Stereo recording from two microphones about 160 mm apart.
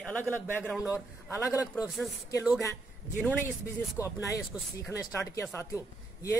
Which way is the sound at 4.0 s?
20° left (ahead or behind).